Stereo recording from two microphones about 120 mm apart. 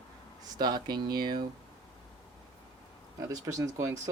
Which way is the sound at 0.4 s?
35° right (ahead or behind).